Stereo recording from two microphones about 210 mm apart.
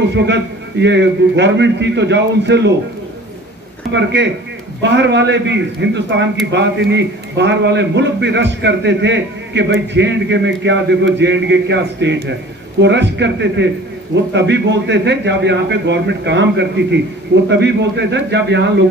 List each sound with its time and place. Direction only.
0.1 s a man's voice: 55° right (ahead or behind)
3.9 s a man's voice: 55° right (ahead or behind)